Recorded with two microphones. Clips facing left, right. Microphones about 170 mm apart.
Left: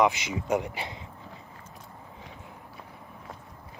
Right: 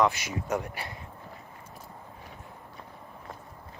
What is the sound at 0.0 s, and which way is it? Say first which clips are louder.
Speech: left 2 dB; 20° left (ahead or behind).